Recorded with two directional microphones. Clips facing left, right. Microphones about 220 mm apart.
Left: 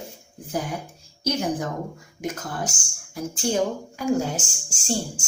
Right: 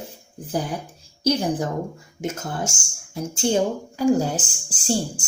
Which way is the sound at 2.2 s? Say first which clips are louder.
Right 2 dB; 25° right (ahead or behind).